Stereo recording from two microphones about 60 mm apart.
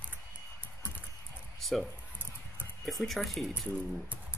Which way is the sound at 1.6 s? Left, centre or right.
Centre.